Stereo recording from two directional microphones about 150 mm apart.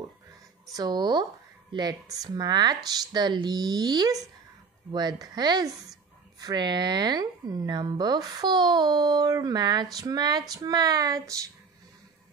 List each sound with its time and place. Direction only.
0.7 s speech: 25° right (ahead or behind)